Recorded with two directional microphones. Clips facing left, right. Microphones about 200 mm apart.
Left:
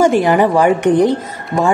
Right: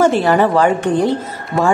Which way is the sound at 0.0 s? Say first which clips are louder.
Left 1 dB; 15° left (ahead or behind).